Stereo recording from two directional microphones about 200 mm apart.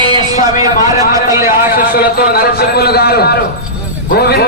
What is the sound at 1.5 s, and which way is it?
A man's voice, 45° left (ahead or behind).